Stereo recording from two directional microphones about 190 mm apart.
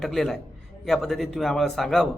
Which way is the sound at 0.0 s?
Centre (ahead or behind).